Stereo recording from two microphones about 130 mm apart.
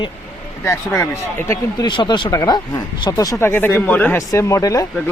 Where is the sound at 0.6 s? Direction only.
20° left (ahead or behind).